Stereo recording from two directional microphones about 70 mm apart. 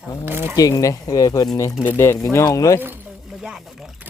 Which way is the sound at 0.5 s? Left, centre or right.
Left.